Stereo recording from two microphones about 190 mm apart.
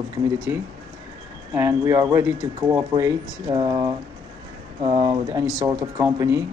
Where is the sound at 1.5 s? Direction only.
10° right (ahead or behind); by 5.2 s 30° right (ahead or behind).